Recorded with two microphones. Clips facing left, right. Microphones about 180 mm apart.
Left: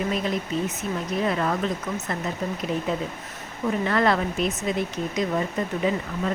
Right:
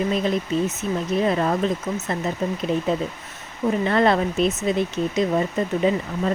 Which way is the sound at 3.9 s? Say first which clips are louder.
Right 3 dB; 25° right (ahead or behind).